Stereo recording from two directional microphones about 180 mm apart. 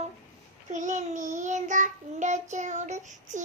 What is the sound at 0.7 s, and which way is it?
Child singing, 40° right (ahead or behind).